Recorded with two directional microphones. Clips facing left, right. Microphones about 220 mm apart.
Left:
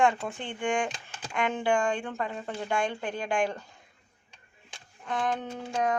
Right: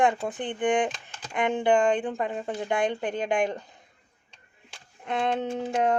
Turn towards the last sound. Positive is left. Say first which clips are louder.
# right 5 dB
turn(degrees=-25)  # may be behind; listen again after turning